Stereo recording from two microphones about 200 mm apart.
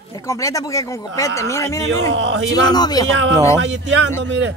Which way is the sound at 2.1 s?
70° right (ahead or behind).